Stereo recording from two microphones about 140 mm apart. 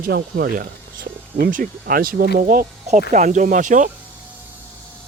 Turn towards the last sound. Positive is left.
turn(degrees=-65)  # may be behind; listen again after turning